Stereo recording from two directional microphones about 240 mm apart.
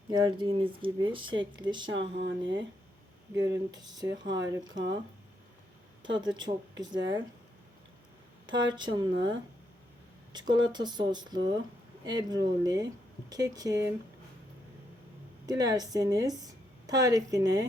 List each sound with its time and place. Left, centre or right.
0.1 s speech: centre
2.1 s speech: right
3.3 s speech: centre
6.0 s speech: centre
8.7 s speech: centre
10.3 s speech: centre
15.4 s a woman's voice: centre